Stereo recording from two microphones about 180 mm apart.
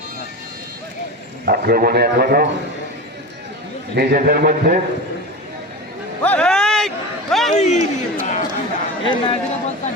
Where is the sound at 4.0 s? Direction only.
60° right (ahead or behind).